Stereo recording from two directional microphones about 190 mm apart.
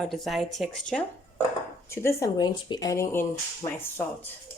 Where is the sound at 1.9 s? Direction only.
15° left (ahead or behind).